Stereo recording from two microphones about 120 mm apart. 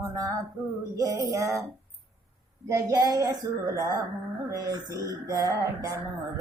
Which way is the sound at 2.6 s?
30° right (ahead or behind).